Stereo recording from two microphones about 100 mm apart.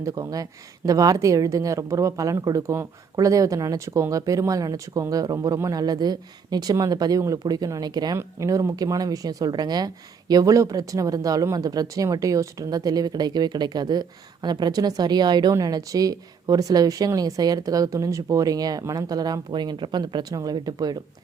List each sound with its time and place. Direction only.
0.0 s a woman's voice: 35° right (ahead or behind)
8.2 s a woman's voice: 30° right (ahead or behind)